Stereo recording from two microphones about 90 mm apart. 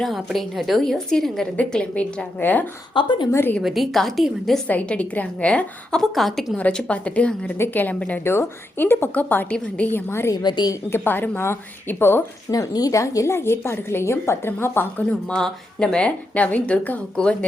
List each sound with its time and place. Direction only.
0.0 s a woman's voice: centre (ahead or behind); by 2.6 s 20° left (ahead or behind)
2.9 s speech: 60° left (ahead or behind)
3.6 s a woman's voice: centre (ahead or behind)
4.7 s speech: 15° left (ahead or behind)
6.6 s speech: 15° left (ahead or behind)
8.2 s a woman's voice: 25° left (ahead or behind)
10.1 s a woman's voice: 30° left (ahead or behind)
10.3 s a woman's voice: 50° left (ahead or behind)
10.8 s a woman's voice: 25° left (ahead or behind)
12.5 s a woman's voice: 40° left (ahead or behind); by 15.0 s 25° left (ahead or behind)
15.1 s speech: 10° left (ahead or behind)